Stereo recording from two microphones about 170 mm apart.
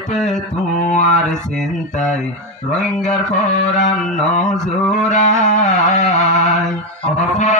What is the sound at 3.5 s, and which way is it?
Speech, 45° left (ahead or behind).